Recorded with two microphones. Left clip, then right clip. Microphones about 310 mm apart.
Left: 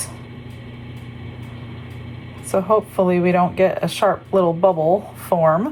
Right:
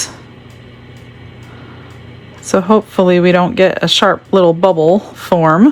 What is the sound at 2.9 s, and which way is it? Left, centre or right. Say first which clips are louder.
Speech: right 7 dB; right.